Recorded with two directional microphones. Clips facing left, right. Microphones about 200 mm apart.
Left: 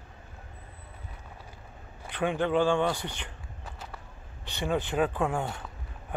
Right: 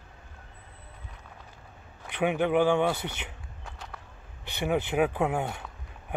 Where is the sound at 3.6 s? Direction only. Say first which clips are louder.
Left 1 dB; 5° left (ahead or behind).